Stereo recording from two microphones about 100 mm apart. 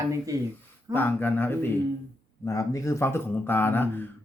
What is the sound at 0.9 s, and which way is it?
Speech, 20° left (ahead or behind).